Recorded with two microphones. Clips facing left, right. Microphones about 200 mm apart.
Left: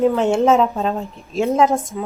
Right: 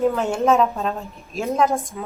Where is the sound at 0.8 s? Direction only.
30° left (ahead or behind).